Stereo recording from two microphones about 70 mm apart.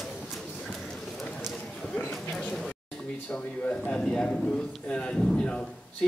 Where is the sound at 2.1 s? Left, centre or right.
Centre.